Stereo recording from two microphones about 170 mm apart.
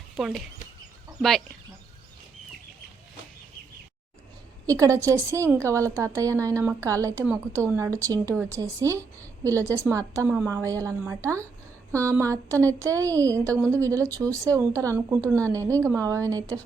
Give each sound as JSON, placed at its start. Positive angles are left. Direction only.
{"t": 0.2, "sound": "speech", "side_deg": 0}
{"t": 4.6, "sound": "a woman's voice", "side_deg": -20}